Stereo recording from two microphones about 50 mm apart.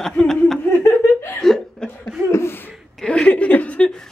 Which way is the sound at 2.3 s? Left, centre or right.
Left.